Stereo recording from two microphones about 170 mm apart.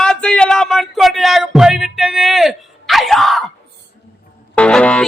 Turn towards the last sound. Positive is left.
turn(degrees=5)  # may be behind; listen again after turning